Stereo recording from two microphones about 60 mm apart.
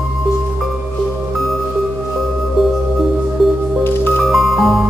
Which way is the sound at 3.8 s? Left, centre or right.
Left.